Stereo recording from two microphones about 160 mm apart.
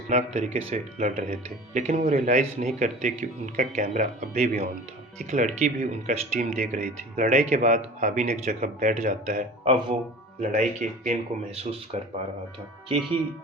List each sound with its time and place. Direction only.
0.1 s speech: 50° right (ahead or behind)
9.6 s speech: 30° right (ahead or behind)
10.4 s speech: 50° right (ahead or behind)